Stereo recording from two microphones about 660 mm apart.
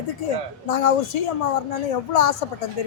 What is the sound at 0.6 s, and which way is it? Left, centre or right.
A woman's voice, left.